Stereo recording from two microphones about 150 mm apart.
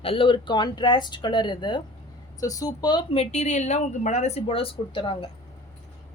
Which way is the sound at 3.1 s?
50° left (ahead or behind).